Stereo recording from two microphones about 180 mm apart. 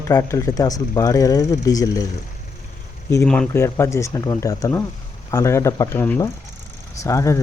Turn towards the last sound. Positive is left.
turn(degrees=15)  # may be behind; listen again after turning